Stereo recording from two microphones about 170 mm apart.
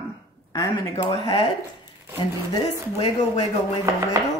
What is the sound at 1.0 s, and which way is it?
Speech, 30° left (ahead or behind).